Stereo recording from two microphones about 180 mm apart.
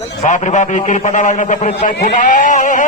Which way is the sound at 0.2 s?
45° left (ahead or behind).